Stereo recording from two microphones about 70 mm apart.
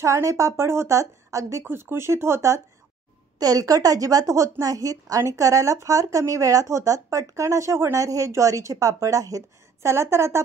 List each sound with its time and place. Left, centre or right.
0.0 s speech: right
1.6 s speech: right
3.3 s speech: right
9.8 s speech: right